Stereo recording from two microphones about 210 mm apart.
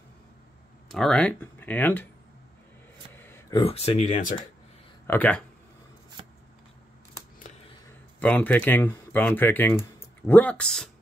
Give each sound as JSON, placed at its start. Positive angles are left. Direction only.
{"t": 0.8, "sound": "speech", "side_deg": 0}
{"t": 3.2, "sound": "a sound", "side_deg": 10}
{"t": 3.5, "sound": "speech", "side_deg": 30}
{"t": 5.0, "sound": "speech", "side_deg": 10}
{"t": 8.2, "sound": "speech", "side_deg": 5}